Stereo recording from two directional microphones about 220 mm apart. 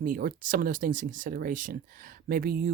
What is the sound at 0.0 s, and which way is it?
Speech, 40° right (ahead or behind).